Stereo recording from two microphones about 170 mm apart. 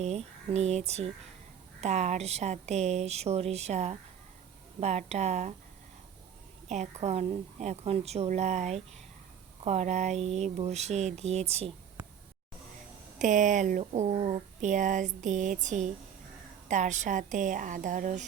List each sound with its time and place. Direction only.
0.0 s a woman's voice: 40° right (ahead or behind)
6.7 s a woman's voice: 45° right (ahead or behind)
13.1 s speech: 50° right (ahead or behind)